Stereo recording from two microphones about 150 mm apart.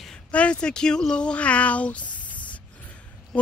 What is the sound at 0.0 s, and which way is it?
Speech, 5° left (ahead or behind).